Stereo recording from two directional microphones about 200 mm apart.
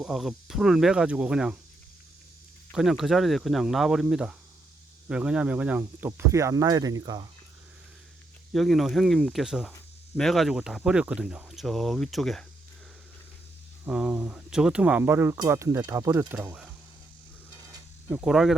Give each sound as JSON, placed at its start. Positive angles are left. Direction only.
{"t": 0.0, "sound": "speech", "side_deg": 0}
{"t": 2.7, "sound": "speech", "side_deg": 0}
{"t": 8.5, "sound": "speech", "side_deg": 0}
{"t": 13.8, "sound": "speech", "side_deg": -5}
{"t": 18.1, "sound": "speech", "side_deg": -5}